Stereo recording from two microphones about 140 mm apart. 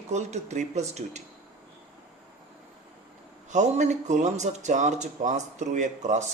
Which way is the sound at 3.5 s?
60° right (ahead or behind).